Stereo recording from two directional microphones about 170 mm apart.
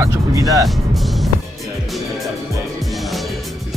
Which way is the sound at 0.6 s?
Centre (ahead or behind).